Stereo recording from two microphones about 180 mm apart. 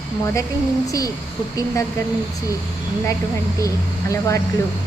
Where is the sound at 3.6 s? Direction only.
15° left (ahead or behind).